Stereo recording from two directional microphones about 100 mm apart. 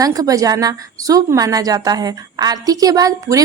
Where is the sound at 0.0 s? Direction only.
35° right (ahead or behind).